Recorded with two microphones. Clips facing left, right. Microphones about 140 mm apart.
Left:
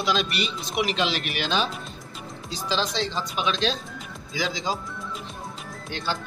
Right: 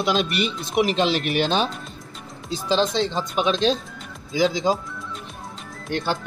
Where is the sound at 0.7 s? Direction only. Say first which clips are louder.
Right 5 dB; 45° right (ahead or behind).